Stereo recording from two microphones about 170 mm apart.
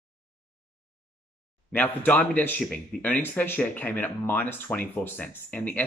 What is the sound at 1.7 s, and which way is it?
Speech, 10° left (ahead or behind).